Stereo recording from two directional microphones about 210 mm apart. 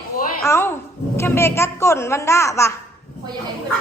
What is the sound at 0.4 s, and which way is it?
A woman's voice, 10° left (ahead or behind).